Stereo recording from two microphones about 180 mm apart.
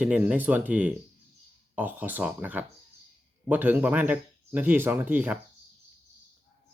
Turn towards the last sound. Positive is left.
turn(degrees=-10)  # may be behind; listen again after turning